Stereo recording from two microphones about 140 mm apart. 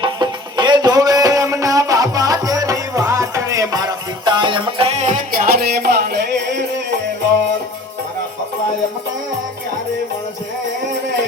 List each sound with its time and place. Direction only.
0.0 s music: 30° right (ahead or behind); by 6.1 s 90° right